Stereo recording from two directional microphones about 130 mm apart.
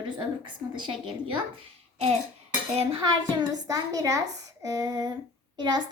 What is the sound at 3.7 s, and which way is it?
A woman's voice, 25° right (ahead or behind).